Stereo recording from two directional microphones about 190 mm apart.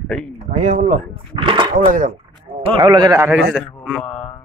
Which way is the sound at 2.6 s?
25° right (ahead or behind).